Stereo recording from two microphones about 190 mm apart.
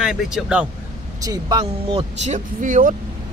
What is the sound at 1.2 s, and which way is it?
Speech, 20° right (ahead or behind).